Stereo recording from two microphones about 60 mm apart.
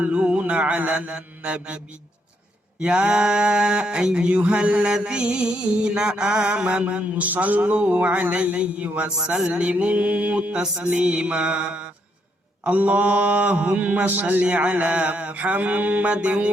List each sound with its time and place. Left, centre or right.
0.0 s mantra: centre
2.8 s a sound: centre
9.2 s mantra: centre